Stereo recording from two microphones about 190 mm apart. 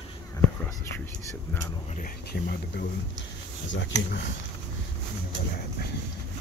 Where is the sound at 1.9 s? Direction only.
50° left (ahead or behind).